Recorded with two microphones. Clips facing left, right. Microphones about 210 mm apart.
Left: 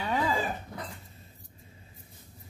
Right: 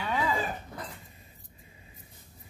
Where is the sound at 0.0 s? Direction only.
30° left (ahead or behind).